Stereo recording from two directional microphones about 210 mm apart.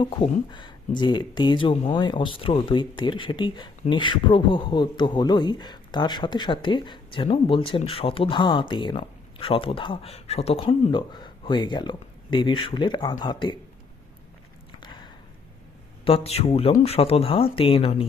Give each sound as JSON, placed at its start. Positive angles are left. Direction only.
{"t": 0.0, "sound": "speech", "side_deg": 20}
{"t": 14.8, "sound": "a sound", "side_deg": 20}
{"t": 16.0, "sound": "speech", "side_deg": 30}